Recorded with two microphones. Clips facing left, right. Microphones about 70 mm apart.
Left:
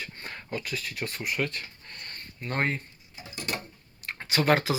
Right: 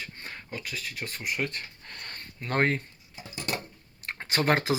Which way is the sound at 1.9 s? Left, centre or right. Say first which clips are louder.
Right 1 dB; right.